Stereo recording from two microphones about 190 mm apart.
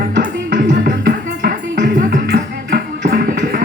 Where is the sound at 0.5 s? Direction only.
70° right (ahead or behind).